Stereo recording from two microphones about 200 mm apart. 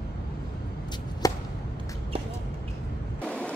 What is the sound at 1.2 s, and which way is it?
Chop, 15° left (ahead or behind).